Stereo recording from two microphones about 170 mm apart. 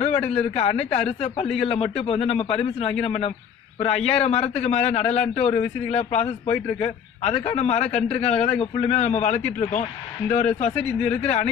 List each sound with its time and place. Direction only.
0.3 s a man's voice: 35° left (ahead or behind)
10.8 s speech: 10° left (ahead or behind)
11.1 s a man's voice: 35° left (ahead or behind)